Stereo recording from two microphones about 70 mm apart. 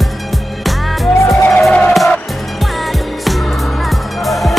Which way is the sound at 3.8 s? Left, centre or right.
Centre.